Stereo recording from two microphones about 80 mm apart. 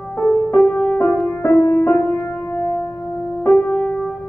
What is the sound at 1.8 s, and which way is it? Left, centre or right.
Music, centre.